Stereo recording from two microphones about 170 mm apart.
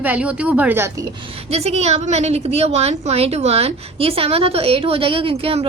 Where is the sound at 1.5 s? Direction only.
40° right (ahead or behind).